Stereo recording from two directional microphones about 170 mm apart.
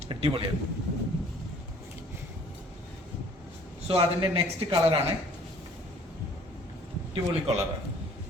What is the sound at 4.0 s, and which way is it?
A man's voice, 35° right (ahead or behind).